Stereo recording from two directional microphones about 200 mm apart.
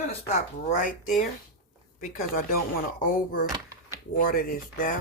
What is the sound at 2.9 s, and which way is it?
Speech, 50° left (ahead or behind).